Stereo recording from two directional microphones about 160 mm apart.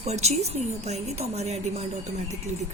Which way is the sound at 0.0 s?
45° right (ahead or behind).